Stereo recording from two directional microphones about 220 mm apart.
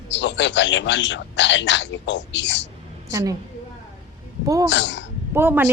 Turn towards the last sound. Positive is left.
turn(degrees=-10)  # may be behind; listen again after turning